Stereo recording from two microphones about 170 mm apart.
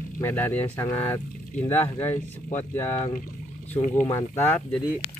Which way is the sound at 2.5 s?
15° left (ahead or behind).